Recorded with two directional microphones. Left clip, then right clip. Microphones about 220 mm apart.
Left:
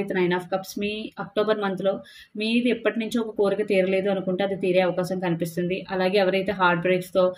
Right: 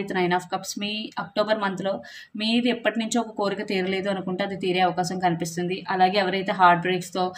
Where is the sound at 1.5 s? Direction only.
20° right (ahead or behind).